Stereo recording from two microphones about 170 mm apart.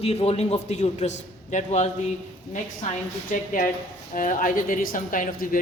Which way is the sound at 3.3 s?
50° left (ahead or behind).